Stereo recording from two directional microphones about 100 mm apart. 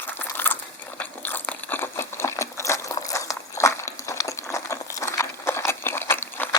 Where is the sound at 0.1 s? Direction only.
20° left (ahead or behind).